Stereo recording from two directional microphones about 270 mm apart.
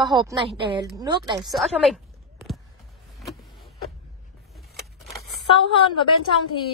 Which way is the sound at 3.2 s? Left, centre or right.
Centre.